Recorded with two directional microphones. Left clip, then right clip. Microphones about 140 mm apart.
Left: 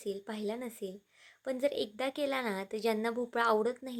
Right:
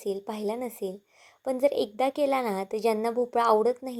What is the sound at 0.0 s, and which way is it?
A woman's voice, 15° right (ahead or behind).